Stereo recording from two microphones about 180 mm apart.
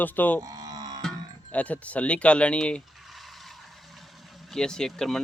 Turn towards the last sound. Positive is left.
turn(degrees=0)  # may be behind; listen again after turning